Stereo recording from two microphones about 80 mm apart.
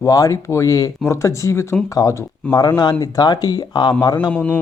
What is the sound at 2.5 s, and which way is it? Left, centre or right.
Speech, left.